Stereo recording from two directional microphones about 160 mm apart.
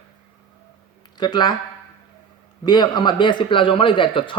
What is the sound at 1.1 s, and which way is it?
Speech, 25° left (ahead or behind).